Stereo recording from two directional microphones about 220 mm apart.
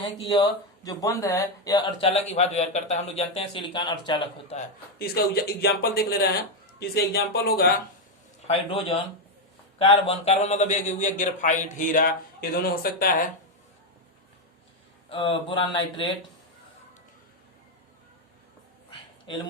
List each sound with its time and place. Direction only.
0.0 s speech: 20° left (ahead or behind)
2.0 s speech: 30° left (ahead or behind)
4.9 s speech: 45° left (ahead or behind)
8.4 s a man's voice: 25° left (ahead or behind); by 13.2 s 40° left (ahead or behind)
15.1 s speech: 25° left (ahead or behind)